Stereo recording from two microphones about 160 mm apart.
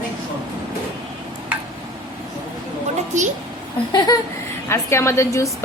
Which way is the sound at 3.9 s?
25° left (ahead or behind).